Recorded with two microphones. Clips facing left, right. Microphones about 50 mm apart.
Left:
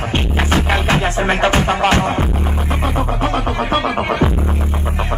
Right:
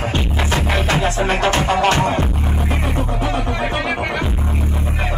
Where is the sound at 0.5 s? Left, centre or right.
Left.